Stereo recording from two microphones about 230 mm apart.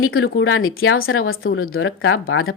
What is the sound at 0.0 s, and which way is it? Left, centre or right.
Speech, left.